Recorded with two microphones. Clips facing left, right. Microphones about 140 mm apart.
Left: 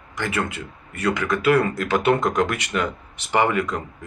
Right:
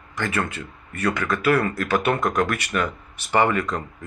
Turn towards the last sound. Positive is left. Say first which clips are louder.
# even
turn(degrees=10)  # may be behind; listen again after turning